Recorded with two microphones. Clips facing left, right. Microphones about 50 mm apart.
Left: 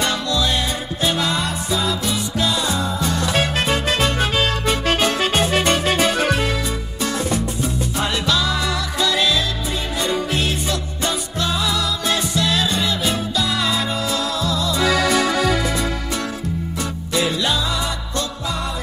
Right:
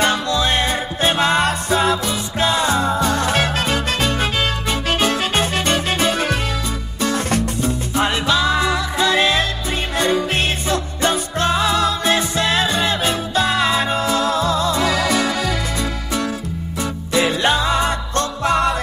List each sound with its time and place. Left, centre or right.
0.0 s music: right
8.0 s music: right
17.1 s music: right
18.4 s music: right